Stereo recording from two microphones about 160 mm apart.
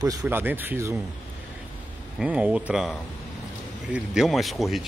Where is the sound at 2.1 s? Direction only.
10° right (ahead or behind).